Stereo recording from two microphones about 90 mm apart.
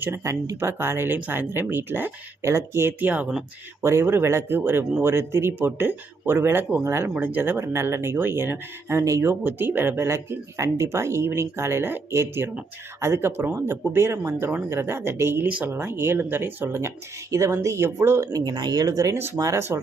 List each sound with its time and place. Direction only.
0.0 s speech: 30° right (ahead or behind)
3.8 s speech: 30° right (ahead or behind)
18.4 s speech: 50° right (ahead or behind)